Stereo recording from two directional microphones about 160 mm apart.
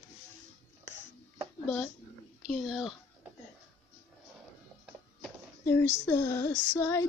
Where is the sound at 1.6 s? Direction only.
10° left (ahead or behind).